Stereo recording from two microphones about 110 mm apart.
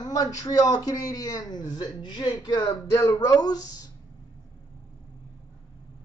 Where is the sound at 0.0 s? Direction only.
35° left (ahead or behind).